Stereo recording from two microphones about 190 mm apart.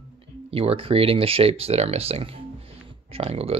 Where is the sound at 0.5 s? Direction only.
30° right (ahead or behind).